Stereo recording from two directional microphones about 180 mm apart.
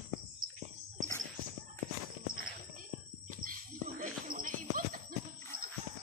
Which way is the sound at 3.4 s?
50° right (ahead or behind).